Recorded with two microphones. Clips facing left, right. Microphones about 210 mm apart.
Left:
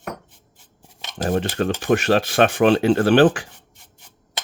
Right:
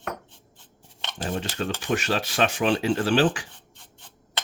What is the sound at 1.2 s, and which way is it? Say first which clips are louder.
Speech: left 8 dB; 55° left (ahead or behind).